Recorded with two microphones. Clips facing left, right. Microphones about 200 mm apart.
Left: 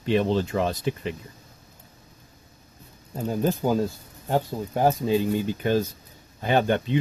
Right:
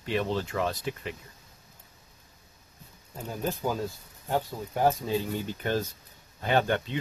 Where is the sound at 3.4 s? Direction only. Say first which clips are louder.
Left 7 dB; 30° left (ahead or behind).